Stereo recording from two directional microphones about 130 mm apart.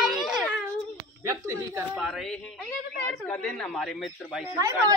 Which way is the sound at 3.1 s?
5° left (ahead or behind).